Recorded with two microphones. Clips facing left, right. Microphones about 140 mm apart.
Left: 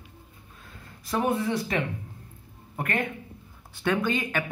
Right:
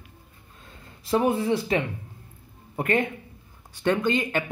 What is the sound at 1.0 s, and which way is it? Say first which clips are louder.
Speech: right 4 dB; 25° right (ahead or behind).